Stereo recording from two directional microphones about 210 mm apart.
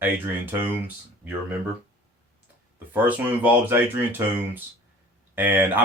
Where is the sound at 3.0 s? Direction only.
10° right (ahead or behind).